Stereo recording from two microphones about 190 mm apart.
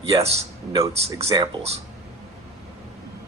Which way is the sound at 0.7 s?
20° right (ahead or behind).